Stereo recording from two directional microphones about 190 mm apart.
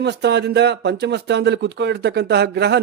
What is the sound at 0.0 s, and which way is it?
Speech, 65° right (ahead or behind).